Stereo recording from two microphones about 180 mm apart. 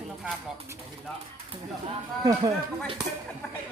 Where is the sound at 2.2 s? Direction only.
20° right (ahead or behind).